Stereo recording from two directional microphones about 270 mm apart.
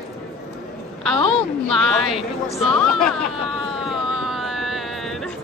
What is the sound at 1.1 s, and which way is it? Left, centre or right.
Speech, left.